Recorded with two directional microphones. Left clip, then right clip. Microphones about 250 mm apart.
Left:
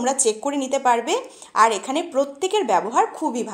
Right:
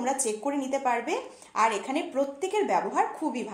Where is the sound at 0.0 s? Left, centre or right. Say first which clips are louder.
Left 7 dB; left.